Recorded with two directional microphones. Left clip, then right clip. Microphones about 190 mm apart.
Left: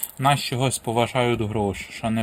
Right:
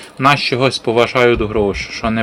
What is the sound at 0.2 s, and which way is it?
Speech, 35° left (ahead or behind).